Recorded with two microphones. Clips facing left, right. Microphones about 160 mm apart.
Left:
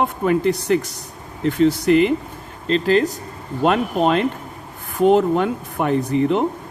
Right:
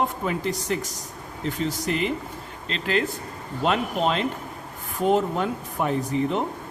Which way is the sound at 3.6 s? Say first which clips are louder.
Left 6 dB; 55° left (ahead or behind).